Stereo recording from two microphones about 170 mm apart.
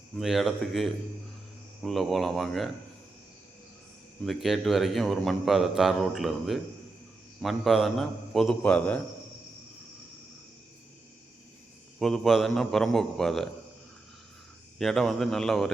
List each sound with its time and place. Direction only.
0.2 s a man's voice: centre (ahead or behind)
4.2 s a man's voice: centre (ahead or behind)
11.9 s a man's voice: centre (ahead or behind)
14.8 s a man's voice: centre (ahead or behind)